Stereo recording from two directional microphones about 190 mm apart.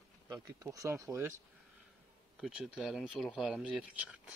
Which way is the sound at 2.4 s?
5° right (ahead or behind).